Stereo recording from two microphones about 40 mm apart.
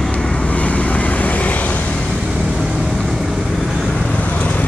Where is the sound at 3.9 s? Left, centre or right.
Left.